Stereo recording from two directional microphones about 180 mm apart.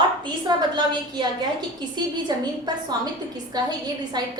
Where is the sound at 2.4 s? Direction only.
25° right (ahead or behind).